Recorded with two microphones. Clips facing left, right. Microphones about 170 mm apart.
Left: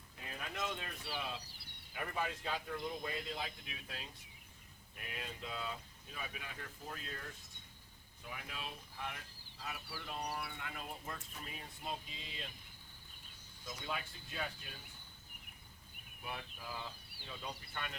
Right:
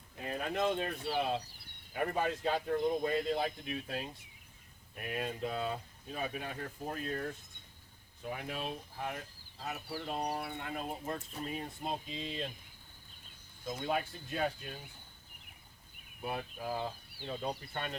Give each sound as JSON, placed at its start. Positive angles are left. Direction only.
{"t": 0.2, "sound": "speech", "side_deg": -50}
{"t": 13.7, "sound": "speech", "side_deg": -50}
{"t": 16.2, "sound": "speech", "side_deg": -45}